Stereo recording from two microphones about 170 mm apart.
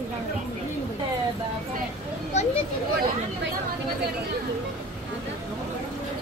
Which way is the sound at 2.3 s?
40° left (ahead or behind).